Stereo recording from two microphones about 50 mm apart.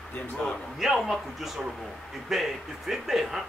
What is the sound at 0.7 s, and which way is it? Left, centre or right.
Speech, centre.